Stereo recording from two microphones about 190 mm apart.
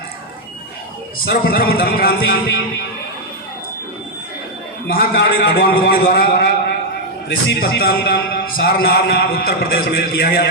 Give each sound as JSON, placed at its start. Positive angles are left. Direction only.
{"t": 1.2, "sound": "a man's voice", "side_deg": 55}
{"t": 4.9, "sound": "a man's voice", "side_deg": 55}